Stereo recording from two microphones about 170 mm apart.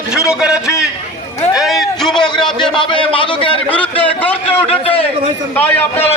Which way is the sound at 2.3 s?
25° left (ahead or behind).